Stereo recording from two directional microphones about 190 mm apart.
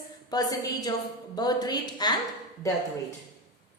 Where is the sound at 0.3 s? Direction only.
20° left (ahead or behind).